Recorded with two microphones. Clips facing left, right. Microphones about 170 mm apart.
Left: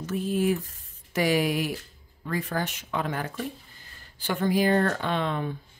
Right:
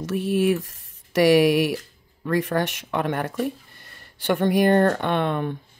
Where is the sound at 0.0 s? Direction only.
75° right (ahead or behind).